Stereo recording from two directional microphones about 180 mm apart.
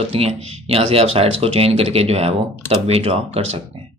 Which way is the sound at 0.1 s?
35° right (ahead or behind).